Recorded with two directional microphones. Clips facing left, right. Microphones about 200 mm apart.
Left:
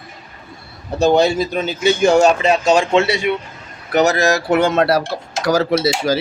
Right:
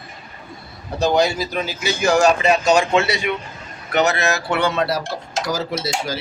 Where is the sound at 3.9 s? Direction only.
40° left (ahead or behind); by 5.0 s 60° left (ahead or behind).